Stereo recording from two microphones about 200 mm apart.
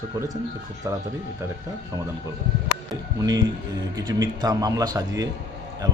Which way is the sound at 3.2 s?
20° right (ahead or behind).